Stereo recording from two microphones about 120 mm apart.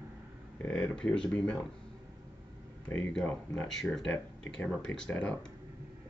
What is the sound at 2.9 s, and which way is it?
Speech, 10° left (ahead or behind).